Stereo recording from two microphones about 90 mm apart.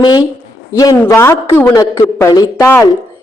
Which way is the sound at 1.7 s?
35° left (ahead or behind).